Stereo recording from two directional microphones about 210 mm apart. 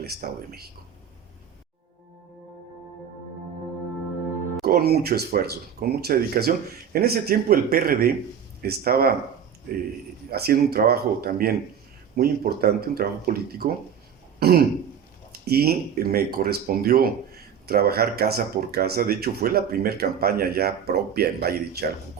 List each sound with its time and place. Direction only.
0.0 s speech: 45° right (ahead or behind)
4.6 s speech: 45° right (ahead or behind)
10.3 s speech: 50° right (ahead or behind)
14.3 s throat clearing: 50° right (ahead or behind)
15.4 s speech: 45° right (ahead or behind)